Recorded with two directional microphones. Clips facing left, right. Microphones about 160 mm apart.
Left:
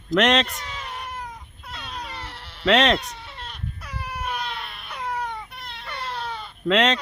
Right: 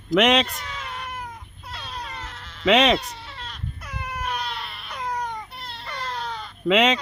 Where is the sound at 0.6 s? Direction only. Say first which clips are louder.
Even; 15° left (ahead or behind).